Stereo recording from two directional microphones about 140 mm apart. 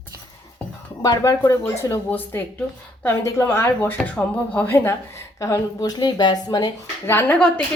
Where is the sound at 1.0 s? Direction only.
25° left (ahead or behind).